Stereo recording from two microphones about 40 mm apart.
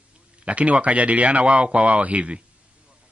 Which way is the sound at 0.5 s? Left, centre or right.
Right.